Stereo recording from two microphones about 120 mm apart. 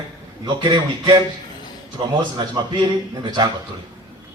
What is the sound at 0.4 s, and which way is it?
Speech, 35° right (ahead or behind).